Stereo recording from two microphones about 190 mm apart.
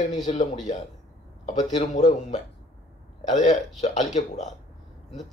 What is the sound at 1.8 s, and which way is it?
Speech, 40° left (ahead or behind).